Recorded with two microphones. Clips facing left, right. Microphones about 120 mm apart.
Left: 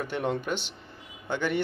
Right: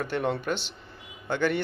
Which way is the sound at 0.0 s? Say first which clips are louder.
Right 1 dB; 15° left (ahead or behind).